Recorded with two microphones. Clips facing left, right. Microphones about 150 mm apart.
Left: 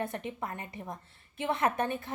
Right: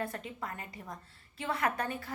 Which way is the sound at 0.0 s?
20° left (ahead or behind).